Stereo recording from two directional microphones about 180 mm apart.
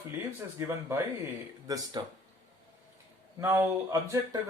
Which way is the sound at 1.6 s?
20° right (ahead or behind).